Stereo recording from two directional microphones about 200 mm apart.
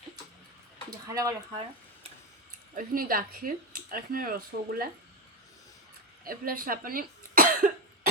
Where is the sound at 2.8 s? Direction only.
45° right (ahead or behind).